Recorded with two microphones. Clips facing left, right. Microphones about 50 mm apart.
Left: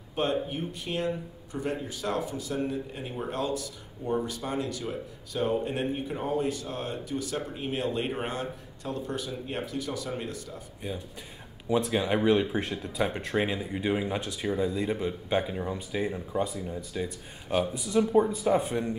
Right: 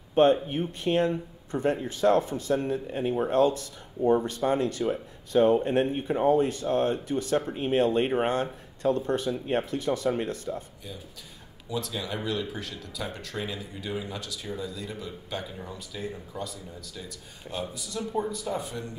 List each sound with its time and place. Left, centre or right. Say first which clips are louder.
0.2 s speech: right 7 dB; right
2.7 s speech: right 7 dB; right
3.3 s speech: right 8 dB; right
11.7 s speech: left 7 dB; left